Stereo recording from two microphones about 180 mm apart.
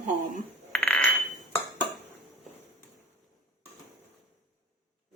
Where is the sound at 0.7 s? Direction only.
5° left (ahead or behind).